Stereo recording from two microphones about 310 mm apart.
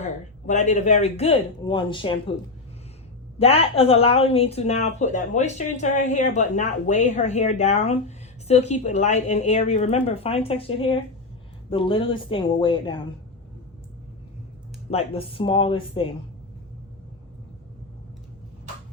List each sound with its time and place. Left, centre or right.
0.0 s speech: left
3.3 s speech: centre
14.8 s speech: centre